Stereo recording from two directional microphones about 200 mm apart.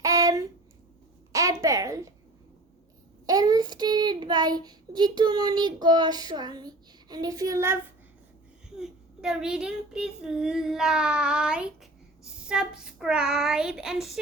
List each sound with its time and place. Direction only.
0.0 s a sound: 15° right (ahead or behind)
3.2 s child singing: 20° right (ahead or behind)
8.8 s speech: 5° right (ahead or behind)